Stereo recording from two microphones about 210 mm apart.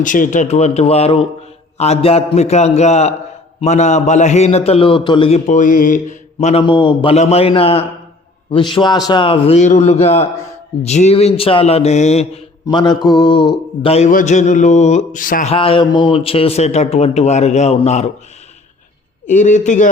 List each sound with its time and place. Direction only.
0.0 s a man's voice: 40° left (ahead or behind)
12.6 s mantra: 20° left (ahead or behind)
13.2 s a man's voice: 20° left (ahead or behind); by 15.5 s 40° left (ahead or behind)
15.5 s a man's voice: 25° left (ahead or behind)
19.3 s a man's voice: 35° left (ahead or behind)